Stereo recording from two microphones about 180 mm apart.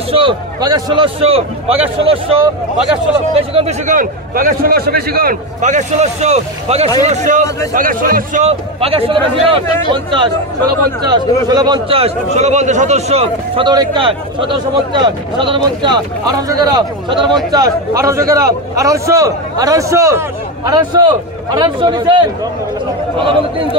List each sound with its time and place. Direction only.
0.1 s a man's voice: 25° right (ahead or behind)
23.2 s a man's voice: 30° right (ahead or behind)